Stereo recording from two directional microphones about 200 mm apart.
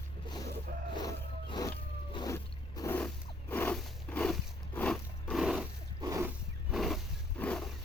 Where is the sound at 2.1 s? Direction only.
20° left (ahead or behind).